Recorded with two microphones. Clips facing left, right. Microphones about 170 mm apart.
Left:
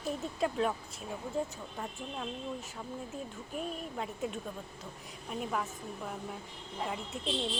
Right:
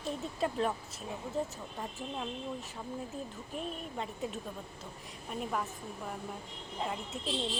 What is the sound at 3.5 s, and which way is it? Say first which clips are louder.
Speech: left 2 dB; centre (ahead or behind).